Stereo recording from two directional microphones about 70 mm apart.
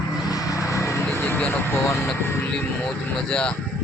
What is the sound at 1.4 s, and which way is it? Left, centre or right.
Speech, left.